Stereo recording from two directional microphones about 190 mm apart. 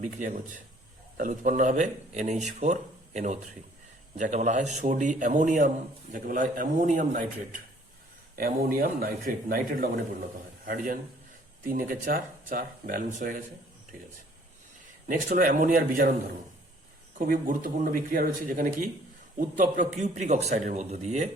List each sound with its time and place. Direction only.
0.0 s a man's voice: 40° right (ahead or behind)
15.0 s speech: 50° right (ahead or behind)
17.2 s a man's voice: 50° right (ahead or behind)